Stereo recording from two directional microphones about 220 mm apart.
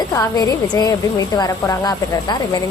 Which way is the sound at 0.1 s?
15° left (ahead or behind).